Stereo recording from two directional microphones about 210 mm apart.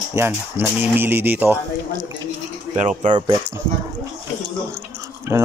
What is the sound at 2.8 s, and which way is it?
Speech, 35° right (ahead or behind).